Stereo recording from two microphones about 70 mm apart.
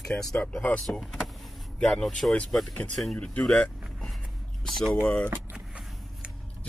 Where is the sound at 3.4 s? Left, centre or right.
Centre.